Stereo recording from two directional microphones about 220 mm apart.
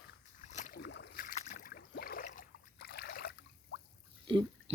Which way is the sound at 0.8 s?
50° left (ahead or behind).